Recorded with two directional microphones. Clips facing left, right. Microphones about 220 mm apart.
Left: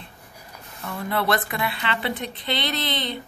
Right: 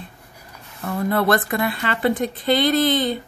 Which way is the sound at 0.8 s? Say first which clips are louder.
Right 5 dB; 45° right (ahead or behind).